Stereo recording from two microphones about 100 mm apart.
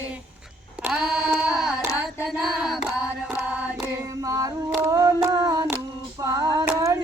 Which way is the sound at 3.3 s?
10° right (ahead or behind).